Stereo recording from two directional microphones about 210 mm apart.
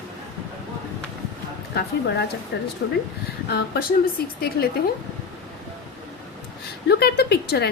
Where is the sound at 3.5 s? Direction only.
45° left (ahead or behind).